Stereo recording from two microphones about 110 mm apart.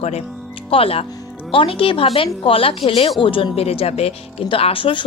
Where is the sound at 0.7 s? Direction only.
60° left (ahead or behind).